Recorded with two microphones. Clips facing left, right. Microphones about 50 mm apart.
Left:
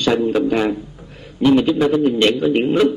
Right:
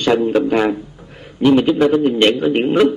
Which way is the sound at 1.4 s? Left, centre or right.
Right.